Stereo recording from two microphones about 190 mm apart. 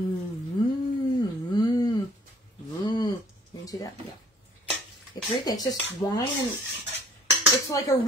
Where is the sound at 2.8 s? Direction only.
20° left (ahead or behind).